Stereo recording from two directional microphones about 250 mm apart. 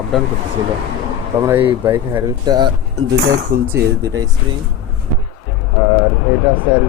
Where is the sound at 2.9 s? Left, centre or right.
Right.